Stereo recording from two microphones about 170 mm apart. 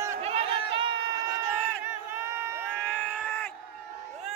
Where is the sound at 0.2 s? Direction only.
35° right (ahead or behind); by 2.6 s 15° right (ahead or behind).